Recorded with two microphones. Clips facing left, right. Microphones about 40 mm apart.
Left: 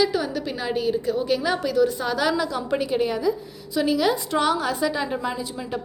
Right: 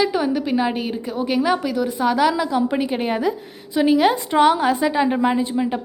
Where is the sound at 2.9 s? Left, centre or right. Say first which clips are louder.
Right 1 dB; right.